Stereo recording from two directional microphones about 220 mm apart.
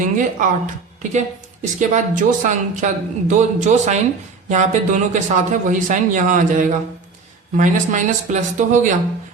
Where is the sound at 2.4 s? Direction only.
35° right (ahead or behind).